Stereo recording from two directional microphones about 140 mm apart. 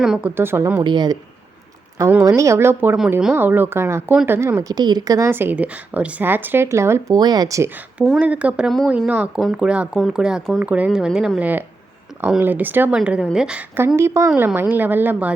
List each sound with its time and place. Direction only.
0.2 s speech: 15° right (ahead or behind)
0.9 s speech: 30° right (ahead or behind)
2.0 s speech: 20° right (ahead or behind)
7.9 s speech: 5° right (ahead or behind)
13.0 s speech: 5° right (ahead or behind)